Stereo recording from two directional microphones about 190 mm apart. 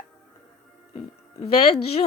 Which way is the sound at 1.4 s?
30° left (ahead or behind).